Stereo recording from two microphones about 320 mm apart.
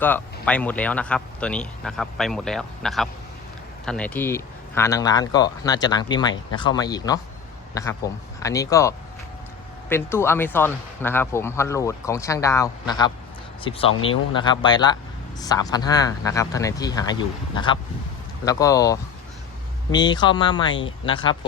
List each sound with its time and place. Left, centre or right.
0.0 s speech: centre